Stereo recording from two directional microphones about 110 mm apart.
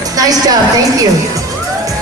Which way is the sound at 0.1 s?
35° right (ahead or behind).